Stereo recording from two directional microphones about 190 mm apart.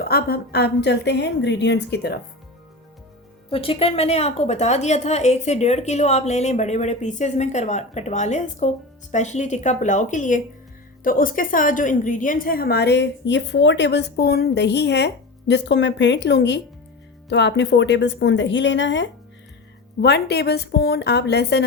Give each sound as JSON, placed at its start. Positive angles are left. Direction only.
{"t": 0.0, "sound": "a woman's voice", "side_deg": 55}
{"t": 3.5, "sound": "a woman's voice", "side_deg": 30}
{"t": 20.0, "sound": "a woman's voice", "side_deg": 60}